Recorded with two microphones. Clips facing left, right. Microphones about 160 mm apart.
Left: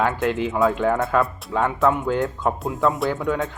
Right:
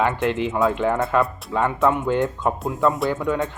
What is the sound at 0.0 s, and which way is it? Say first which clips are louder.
Speech: even; centre (ahead or behind).